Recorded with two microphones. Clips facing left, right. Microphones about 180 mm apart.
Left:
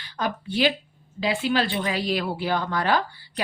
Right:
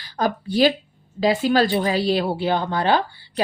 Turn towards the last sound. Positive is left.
turn(degrees=-30)  # may be behind; listen again after turning